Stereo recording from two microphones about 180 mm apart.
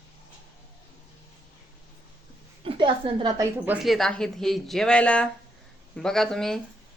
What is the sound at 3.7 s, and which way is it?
Speech, centre (ahead or behind).